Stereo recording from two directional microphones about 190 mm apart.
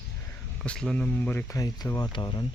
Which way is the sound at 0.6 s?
5° left (ahead or behind).